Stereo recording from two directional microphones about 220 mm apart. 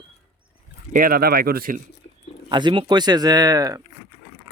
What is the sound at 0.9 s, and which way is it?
Speech, 40° right (ahead or behind).